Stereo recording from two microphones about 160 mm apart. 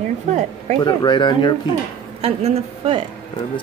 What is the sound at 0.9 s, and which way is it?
Speech, 30° left (ahead or behind).